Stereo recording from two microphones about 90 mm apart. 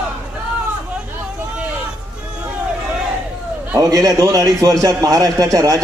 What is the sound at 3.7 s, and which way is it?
A man's voice, 45° right (ahead or behind).